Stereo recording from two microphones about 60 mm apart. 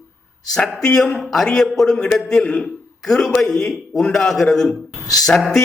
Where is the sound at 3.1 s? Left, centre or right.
Centre.